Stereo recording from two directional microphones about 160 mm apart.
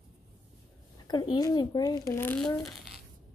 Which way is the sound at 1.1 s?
25° left (ahead or behind).